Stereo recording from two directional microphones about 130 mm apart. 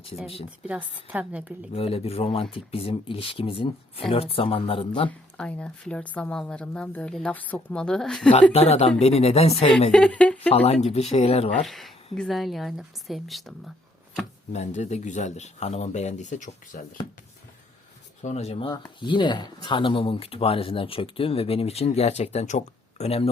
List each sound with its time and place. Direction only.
0.4 s speech: 10° right (ahead or behind)
1.7 s speech: 50° left (ahead or behind)
5.0 s a woman's voice: 10° left (ahead or behind)
8.5 s speech: 50° left (ahead or behind)
9.9 s a woman's voice: 10° left (ahead or behind)
10.5 s speech: 50° left (ahead or behind)
11.6 s a woman's voice: centre (ahead or behind)
14.5 s speech: 60° left (ahead or behind)
18.2 s speech: 60° left (ahead or behind)
18.7 s speech: 40° left (ahead or behind)